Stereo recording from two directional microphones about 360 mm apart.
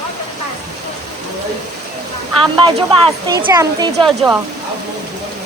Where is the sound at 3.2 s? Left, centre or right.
Centre.